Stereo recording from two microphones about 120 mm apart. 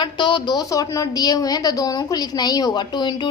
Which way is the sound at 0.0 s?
40° left (ahead or behind).